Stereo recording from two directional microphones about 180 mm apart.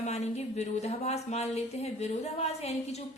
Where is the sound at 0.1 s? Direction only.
40° left (ahead or behind).